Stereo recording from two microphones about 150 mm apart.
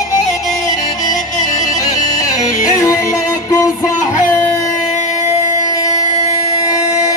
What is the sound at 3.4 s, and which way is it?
Music, 20° left (ahead or behind).